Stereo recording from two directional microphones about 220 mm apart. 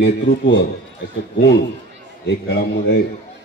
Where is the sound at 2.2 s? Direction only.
50° left (ahead or behind).